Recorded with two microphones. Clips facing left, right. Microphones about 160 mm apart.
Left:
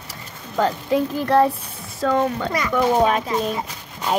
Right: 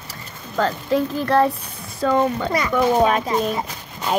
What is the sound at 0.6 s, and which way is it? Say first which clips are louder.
Speech: even; 15° left (ahead or behind).